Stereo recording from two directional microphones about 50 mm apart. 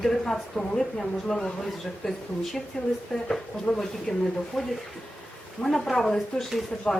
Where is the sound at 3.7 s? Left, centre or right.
Left.